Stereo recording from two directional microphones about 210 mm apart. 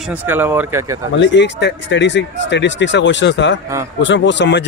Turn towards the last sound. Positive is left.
turn(degrees=55)  # may be behind; listen again after turning